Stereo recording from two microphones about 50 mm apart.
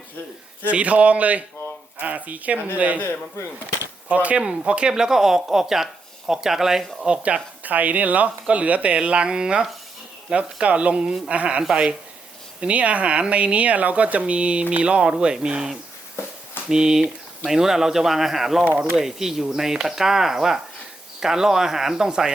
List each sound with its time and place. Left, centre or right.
0.7 s speech: right
4.1 s speech: right; by 7.1 s centre
7.1 s speech: right
16.6 s speech: centre